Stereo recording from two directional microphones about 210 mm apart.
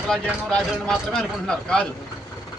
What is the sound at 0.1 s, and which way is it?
Speech, 5° left (ahead or behind).